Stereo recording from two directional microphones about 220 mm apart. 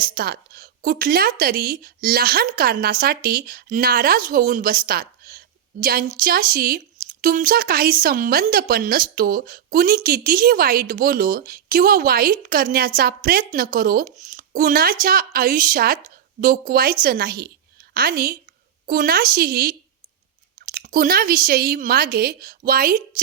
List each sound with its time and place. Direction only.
0.0 s a woman's voice: 45° right (ahead or behind)
20.7 s a woman's voice: 40° right (ahead or behind)